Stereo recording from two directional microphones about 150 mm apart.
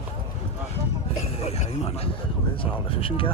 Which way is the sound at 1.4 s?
40° left (ahead or behind).